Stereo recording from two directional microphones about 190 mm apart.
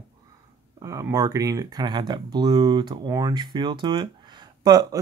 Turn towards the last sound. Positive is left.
turn(degrees=-20)  # may be behind; listen again after turning